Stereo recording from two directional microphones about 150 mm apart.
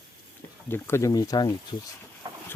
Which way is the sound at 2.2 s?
25° right (ahead or behind).